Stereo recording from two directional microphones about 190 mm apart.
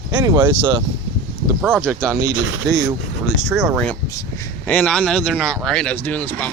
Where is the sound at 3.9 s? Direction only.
15° left (ahead or behind).